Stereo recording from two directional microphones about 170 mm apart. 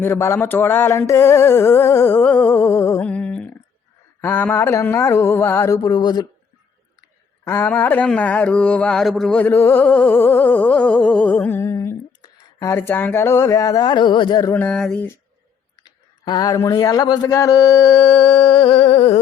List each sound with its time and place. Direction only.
0.0 s mantra: 15° left (ahead or behind)
7.4 s mantra: 15° left (ahead or behind)
14.5 s mantra: 5° left (ahead or behind)
16.2 s speech: 20° left (ahead or behind)